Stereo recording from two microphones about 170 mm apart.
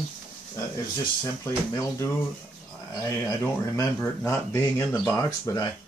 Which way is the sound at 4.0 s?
15° left (ahead or behind).